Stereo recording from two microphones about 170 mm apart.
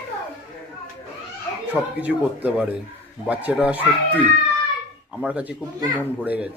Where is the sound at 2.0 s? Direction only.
10° right (ahead or behind).